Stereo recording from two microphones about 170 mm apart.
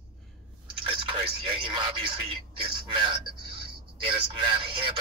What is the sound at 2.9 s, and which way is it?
Speech, 30° right (ahead or behind).